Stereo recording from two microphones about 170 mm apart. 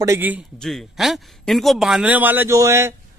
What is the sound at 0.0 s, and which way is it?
Speech, 15° right (ahead or behind).